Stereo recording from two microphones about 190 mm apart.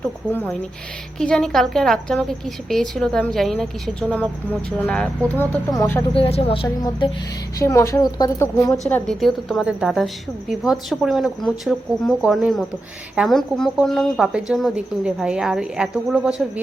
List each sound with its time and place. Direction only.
0.3 s a woman's voice: 10° left (ahead or behind)
6.1 s speech: 30° left (ahead or behind)
7.6 s a woman's voice: 15° left (ahead or behind)
8.8 s a woman's voice: centre (ahead or behind)